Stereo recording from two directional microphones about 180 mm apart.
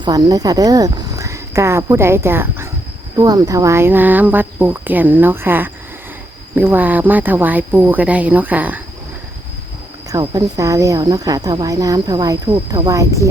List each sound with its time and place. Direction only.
0.0 s speech: 20° right (ahead or behind)
10.1 s speech: 20° right (ahead or behind)